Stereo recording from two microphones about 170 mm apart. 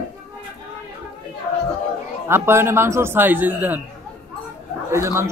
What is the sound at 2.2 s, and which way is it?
A man's voice, 15° right (ahead or behind).